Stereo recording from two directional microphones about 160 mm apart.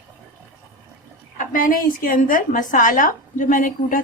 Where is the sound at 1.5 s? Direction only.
60° left (ahead or behind).